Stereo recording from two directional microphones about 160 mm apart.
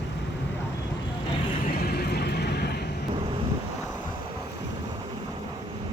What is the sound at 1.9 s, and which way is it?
Vehicle, 90° left.